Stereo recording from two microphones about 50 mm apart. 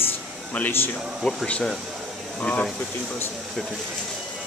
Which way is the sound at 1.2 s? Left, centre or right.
Centre.